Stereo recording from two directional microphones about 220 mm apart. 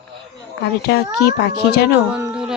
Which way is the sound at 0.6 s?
45° left (ahead or behind).